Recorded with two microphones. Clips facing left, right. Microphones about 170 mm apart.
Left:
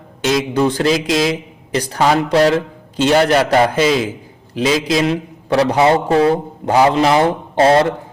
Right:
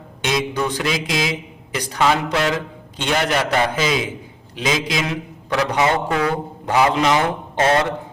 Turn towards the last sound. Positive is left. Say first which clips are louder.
# left 6 dB
turn(degrees=30)  # may be behind; listen again after turning